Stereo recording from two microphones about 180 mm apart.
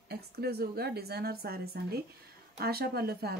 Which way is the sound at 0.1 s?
60° right (ahead or behind).